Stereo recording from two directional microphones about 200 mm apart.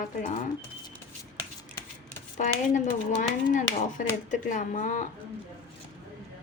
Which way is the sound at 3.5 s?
40° left (ahead or behind).